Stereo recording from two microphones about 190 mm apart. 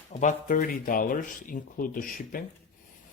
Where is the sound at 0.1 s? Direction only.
40° left (ahead or behind).